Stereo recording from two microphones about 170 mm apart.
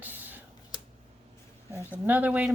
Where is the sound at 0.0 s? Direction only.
10° right (ahead or behind).